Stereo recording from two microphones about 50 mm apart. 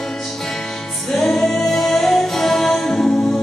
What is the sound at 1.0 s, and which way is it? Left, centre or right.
Music, centre.